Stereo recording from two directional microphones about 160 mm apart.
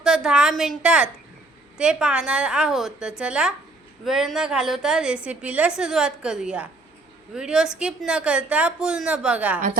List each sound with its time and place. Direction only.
0.0 s a woman's voice: 5° right (ahead or behind)